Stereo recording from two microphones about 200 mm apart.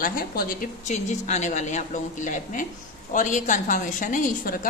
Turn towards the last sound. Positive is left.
turn(degrees=40)  # may be behind; listen again after turning